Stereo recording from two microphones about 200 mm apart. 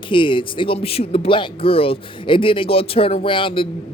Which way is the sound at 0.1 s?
25° left (ahead or behind).